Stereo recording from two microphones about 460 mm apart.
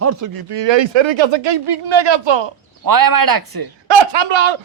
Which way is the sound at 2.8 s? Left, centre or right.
Right.